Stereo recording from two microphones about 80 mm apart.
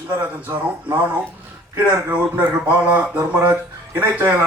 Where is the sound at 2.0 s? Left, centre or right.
Right.